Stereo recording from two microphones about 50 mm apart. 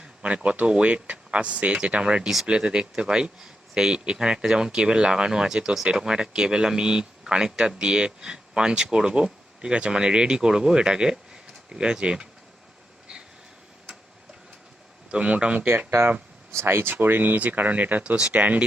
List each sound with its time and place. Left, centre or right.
0.0 s a sound: right
0.4 s speech: right
2.2 s speech: centre
2.5 s speech: centre
15.1 s speech: right
16.6 s speech: right
18.1 s speech: right
18.3 s speech: right